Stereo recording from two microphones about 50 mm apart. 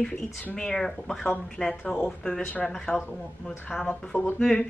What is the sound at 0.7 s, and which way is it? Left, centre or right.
A woman's voice, centre.